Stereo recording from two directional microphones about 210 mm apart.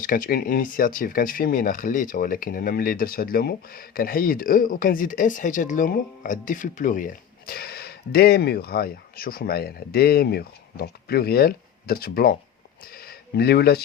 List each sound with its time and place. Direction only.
0.0 s speech: 40° left (ahead or behind)